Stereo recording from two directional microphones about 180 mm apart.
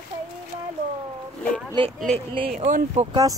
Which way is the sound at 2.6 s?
40° right (ahead or behind).